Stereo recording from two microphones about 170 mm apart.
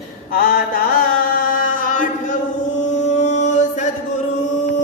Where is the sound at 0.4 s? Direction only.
60° left (ahead or behind).